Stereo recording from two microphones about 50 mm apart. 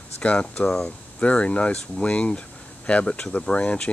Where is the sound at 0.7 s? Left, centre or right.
Centre.